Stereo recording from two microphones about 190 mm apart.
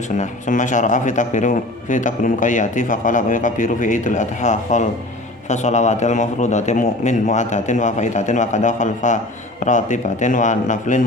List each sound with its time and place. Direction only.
0.2 s a man's voice: 40° left (ahead or behind)